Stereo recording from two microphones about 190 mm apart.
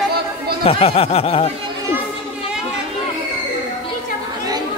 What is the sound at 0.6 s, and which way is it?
Speech, 30° left (ahead or behind).